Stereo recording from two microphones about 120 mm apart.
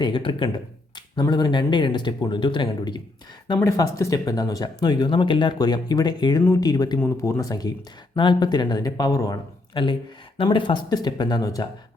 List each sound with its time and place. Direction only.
0.0 s speech: 45° left (ahead or behind)
3.6 s speech: 25° left (ahead or behind)